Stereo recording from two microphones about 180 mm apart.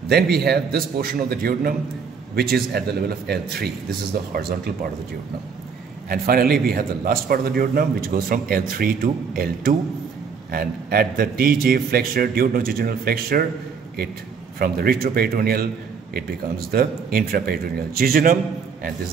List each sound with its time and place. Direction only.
0.1 s a man's voice: 65° right (ahead or behind)
6.0 s a man's voice: 55° right (ahead or behind)
14.6 s a man's voice: 55° right (ahead or behind)